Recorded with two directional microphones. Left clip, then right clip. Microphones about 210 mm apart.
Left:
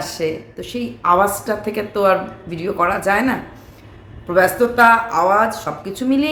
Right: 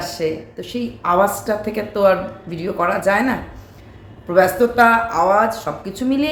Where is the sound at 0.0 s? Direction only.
10° left (ahead or behind).